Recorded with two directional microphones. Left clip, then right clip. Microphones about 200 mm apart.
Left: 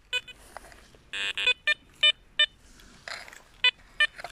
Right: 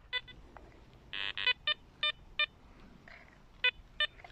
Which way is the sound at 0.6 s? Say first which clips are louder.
Left 13 dB; 25° left (ahead or behind).